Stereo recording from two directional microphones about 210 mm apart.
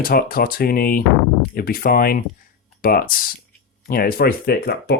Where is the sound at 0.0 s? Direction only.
45° left (ahead or behind).